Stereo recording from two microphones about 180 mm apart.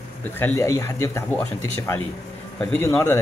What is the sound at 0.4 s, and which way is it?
Speech, 15° left (ahead or behind).